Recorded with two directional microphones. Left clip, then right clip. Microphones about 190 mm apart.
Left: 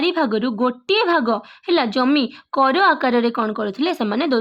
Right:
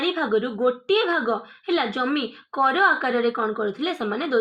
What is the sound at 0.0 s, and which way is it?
A woman's voice, 55° left (ahead or behind).